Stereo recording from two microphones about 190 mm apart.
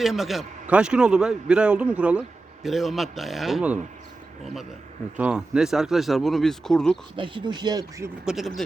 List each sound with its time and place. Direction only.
0.0 s a man's voice: centre (ahead or behind)
5.1 s a man's voice: 5° right (ahead or behind)
7.2 s speech: 25° right (ahead or behind)
8.2 s a man's voice: centre (ahead or behind)